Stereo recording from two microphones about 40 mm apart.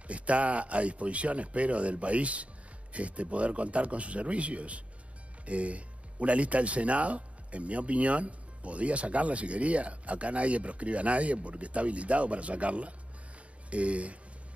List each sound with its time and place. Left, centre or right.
0.1 s speech: right